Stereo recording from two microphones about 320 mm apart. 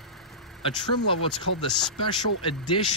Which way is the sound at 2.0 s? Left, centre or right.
Centre.